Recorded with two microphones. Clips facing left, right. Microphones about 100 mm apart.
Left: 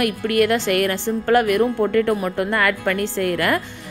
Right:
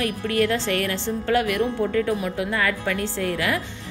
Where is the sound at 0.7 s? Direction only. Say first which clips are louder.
Left 5 dB; 55° left (ahead or behind).